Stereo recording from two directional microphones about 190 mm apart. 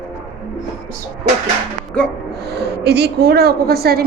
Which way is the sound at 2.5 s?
60° right (ahead or behind).